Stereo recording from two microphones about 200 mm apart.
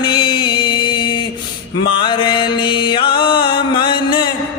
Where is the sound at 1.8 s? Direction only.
25° left (ahead or behind).